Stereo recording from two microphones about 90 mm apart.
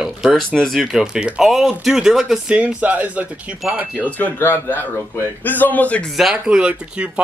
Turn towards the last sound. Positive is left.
turn(degrees=-10)  # may be behind; listen again after turning